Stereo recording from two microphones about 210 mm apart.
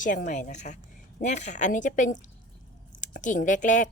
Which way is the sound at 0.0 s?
40° left (ahead or behind).